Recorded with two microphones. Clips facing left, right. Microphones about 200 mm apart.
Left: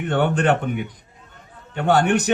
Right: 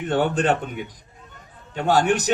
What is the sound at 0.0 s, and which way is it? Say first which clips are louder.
A man's voice: left 1 dB; 60° left (ahead or behind).